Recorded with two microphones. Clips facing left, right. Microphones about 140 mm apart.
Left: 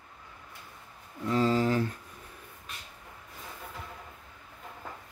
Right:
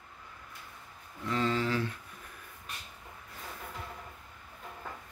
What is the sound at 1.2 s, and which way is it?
Speech, 35° left (ahead or behind).